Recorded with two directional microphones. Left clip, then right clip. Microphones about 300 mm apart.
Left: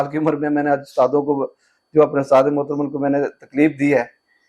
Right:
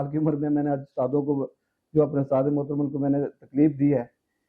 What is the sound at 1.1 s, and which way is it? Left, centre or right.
Speech, centre.